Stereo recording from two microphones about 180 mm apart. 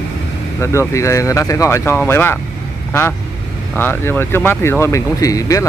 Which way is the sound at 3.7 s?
10° left (ahead or behind).